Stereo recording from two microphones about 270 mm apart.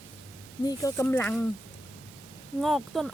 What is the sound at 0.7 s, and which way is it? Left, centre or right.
Speech, centre.